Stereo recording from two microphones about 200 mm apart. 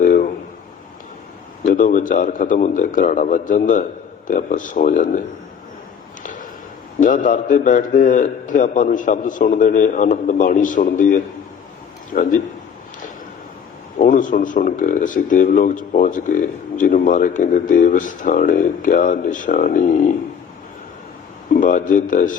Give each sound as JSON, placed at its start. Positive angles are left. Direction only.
{"t": 0.0, "sound": "a sound", "side_deg": 45}
{"t": 1.6, "sound": "speech", "side_deg": 40}
{"t": 6.2, "sound": "a sound", "side_deg": 40}
{"t": 7.0, "sound": "speech", "side_deg": 40}
{"t": 14.0, "sound": "speech", "side_deg": 40}
{"t": 21.5, "sound": "speech", "side_deg": 40}